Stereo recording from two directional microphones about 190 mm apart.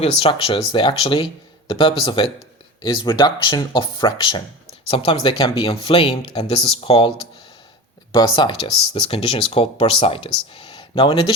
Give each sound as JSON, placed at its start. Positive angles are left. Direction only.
{"t": 0.0, "sound": "speech", "side_deg": 30}
{"t": 8.1, "sound": "speech", "side_deg": 25}